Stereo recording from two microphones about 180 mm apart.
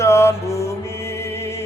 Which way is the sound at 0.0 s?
15° left (ahead or behind).